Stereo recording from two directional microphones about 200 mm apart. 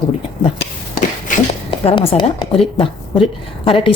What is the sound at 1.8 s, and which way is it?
Speech, 30° left (ahead or behind).